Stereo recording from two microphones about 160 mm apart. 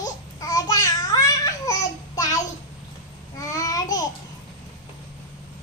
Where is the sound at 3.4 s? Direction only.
20° left (ahead or behind).